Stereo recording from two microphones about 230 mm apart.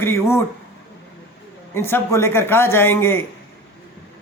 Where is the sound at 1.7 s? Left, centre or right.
Centre.